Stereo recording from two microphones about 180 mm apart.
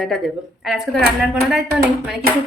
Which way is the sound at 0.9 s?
60° right (ahead or behind).